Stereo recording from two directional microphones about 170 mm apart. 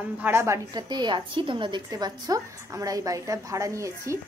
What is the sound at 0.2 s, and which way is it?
A woman's voice, 15° right (ahead or behind).